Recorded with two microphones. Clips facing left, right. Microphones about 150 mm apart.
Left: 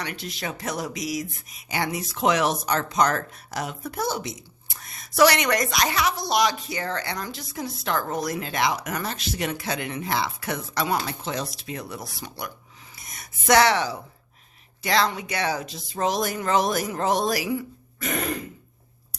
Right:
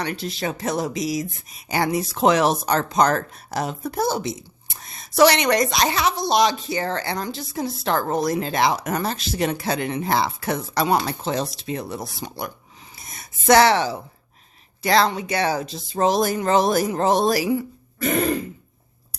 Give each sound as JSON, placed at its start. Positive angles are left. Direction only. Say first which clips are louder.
{"t": 0.0, "sound": "speech", "louder": "right 6 dB", "side_deg": -30}